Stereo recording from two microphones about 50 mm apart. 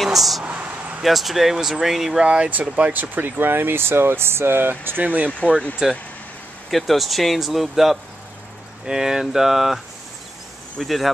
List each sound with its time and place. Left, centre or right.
0.0 s speech: centre
0.5 s a sound: right
1.0 s speech: centre
2.2 s speech: right
5.0 s speech: right
5.8 s speech: centre
6.7 s speech: centre
10.8 s speech: centre